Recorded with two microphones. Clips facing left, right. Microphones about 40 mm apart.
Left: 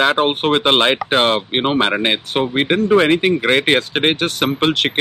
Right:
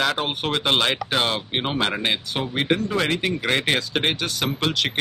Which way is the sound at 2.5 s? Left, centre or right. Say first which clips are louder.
Left 7 dB; left.